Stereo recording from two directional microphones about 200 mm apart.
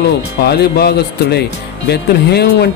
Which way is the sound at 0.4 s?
55° left (ahead or behind).